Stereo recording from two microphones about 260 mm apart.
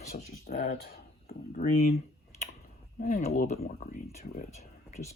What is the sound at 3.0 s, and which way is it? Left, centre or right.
Speech, left.